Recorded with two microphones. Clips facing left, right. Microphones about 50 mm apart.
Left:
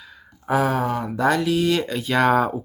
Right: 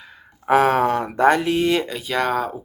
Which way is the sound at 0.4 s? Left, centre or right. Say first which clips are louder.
Right 5 dB; right.